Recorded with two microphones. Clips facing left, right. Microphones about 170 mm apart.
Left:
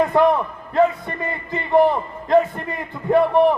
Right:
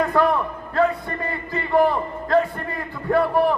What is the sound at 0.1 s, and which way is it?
A man's voice, 20° left (ahead or behind).